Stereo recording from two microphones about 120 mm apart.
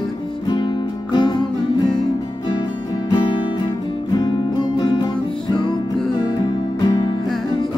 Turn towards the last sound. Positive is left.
turn(degrees=35)  # may be behind; listen again after turning